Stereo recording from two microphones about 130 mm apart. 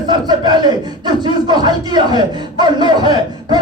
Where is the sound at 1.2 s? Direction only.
35° right (ahead or behind).